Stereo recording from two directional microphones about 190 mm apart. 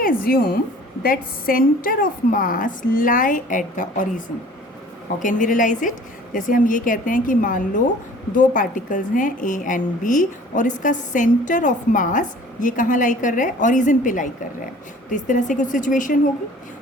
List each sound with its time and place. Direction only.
0.0 s a woman's voice: 50° left (ahead or behind)
5.2 s a woman's voice: 45° left (ahead or behind)